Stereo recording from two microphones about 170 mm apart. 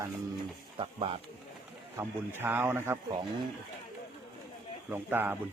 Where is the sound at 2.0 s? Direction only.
15° right (ahead or behind).